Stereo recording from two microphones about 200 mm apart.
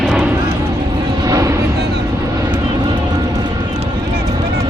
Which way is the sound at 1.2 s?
15° right (ahead or behind).